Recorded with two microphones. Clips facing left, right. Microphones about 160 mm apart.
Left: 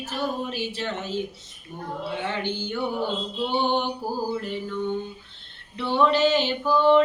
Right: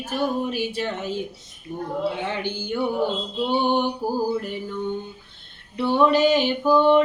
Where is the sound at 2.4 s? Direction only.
15° right (ahead or behind).